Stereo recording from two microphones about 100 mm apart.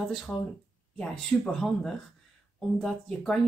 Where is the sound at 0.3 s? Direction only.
10° left (ahead or behind).